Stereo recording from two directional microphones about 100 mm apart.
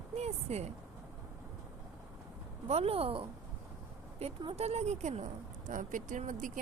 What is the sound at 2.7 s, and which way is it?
Speech, 85° right.